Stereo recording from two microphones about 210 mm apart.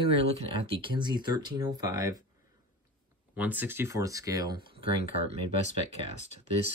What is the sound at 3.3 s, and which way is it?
Speech, 10° right (ahead or behind).